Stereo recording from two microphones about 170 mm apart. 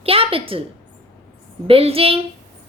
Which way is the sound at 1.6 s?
35° right (ahead or behind).